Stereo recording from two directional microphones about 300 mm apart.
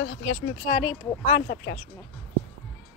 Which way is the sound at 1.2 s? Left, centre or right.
Left.